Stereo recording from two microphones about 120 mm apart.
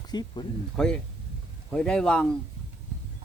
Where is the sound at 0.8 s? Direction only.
5° left (ahead or behind).